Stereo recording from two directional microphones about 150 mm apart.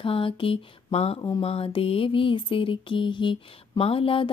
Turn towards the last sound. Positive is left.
turn(degrees=35)  # may be behind; listen again after turning